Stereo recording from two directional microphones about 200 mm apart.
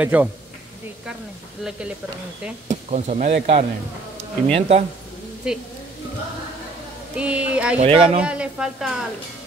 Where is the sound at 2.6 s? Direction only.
35° right (ahead or behind).